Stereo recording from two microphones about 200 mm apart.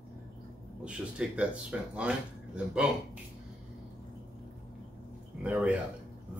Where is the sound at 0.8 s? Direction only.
5° right (ahead or behind).